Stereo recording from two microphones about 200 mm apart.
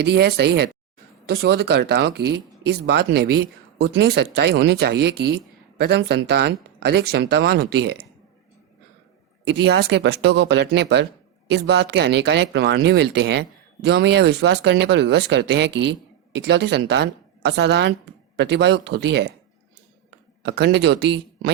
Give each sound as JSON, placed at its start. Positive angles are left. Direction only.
{"t": 0.1, "sound": "speech", "side_deg": -55}
{"t": 9.4, "sound": "speech", "side_deg": -55}
{"t": 20.4, "sound": "speech", "side_deg": -55}